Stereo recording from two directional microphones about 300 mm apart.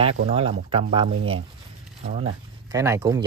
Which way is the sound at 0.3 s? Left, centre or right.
Centre.